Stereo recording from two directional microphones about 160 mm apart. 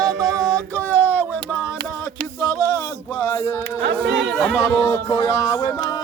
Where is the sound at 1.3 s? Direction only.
10° right (ahead or behind).